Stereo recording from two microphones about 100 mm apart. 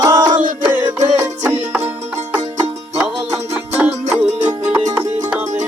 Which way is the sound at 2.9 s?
5° right (ahead or behind).